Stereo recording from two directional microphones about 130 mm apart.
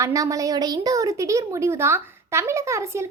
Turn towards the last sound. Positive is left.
turn(degrees=-20)  # may be behind; listen again after turning